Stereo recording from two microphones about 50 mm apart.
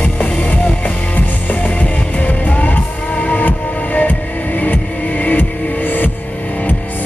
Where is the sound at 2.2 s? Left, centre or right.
Left.